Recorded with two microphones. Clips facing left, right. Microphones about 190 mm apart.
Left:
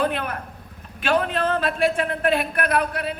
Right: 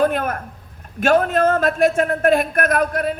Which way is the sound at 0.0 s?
45° right (ahead or behind).